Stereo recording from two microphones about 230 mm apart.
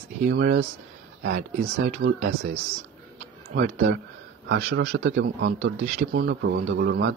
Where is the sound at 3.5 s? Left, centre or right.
Right.